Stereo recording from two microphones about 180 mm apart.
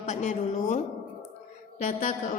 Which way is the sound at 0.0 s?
40° left (ahead or behind).